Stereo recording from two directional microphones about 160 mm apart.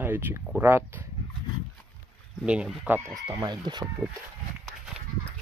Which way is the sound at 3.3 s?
25° right (ahead or behind).